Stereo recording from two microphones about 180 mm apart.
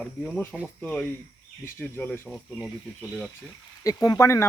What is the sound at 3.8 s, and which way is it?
Speech, 20° left (ahead or behind).